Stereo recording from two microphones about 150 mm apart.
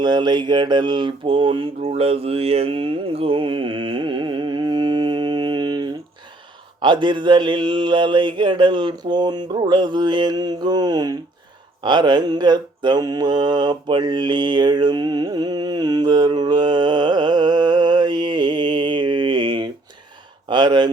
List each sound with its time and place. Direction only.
0.0 s speech: 30° right (ahead or behind)
6.8 s mantra: 30° right (ahead or behind)
20.5 s speech: 30° right (ahead or behind)